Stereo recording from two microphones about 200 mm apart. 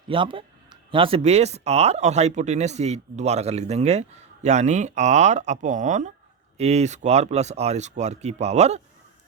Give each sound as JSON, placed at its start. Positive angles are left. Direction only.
{"t": 0.1, "sound": "speech", "side_deg": -25}